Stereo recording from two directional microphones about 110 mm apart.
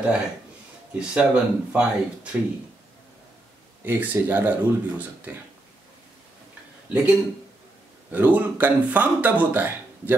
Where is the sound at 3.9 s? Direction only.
20° right (ahead or behind).